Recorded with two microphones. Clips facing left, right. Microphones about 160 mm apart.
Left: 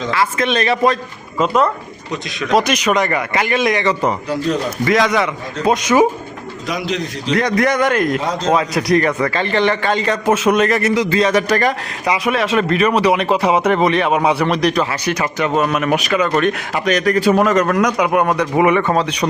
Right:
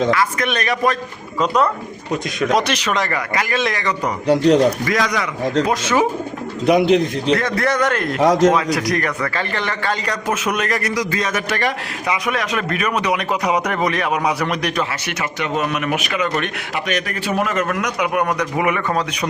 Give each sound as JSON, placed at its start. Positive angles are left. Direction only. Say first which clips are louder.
{"t": 0.1, "sound": "a man's voice", "louder": "left 1 dB", "side_deg": 25}
{"t": 2.6, "sound": "a man's voice", "louder": "left 4 dB", "side_deg": 10}
{"t": 4.3, "sound": "speech", "louder": "right 6 dB", "side_deg": -75}
{"t": 4.9, "sound": "a man's voice", "louder": "left 5 dB", "side_deg": 25}
{"t": 5.8, "sound": "a man's voice", "louder": "left 4 dB", "side_deg": 10}
{"t": 6.7, "sound": "a man's voice", "louder": "right 8 dB", "side_deg": -60}
{"t": 7.3, "sound": "a man's voice", "louder": "left 7 dB", "side_deg": 20}
{"t": 8.2, "sound": "a man's voice", "louder": "right 8 dB", "side_deg": -90}
{"t": 8.5, "sound": "a man's voice", "louder": "left 4 dB", "side_deg": 25}
{"t": 12.1, "sound": "speech", "louder": "left 6 dB", "side_deg": 25}